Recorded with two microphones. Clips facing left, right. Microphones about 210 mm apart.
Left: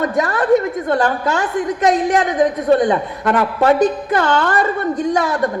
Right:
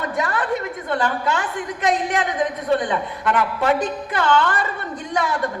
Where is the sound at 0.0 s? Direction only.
45° left (ahead or behind).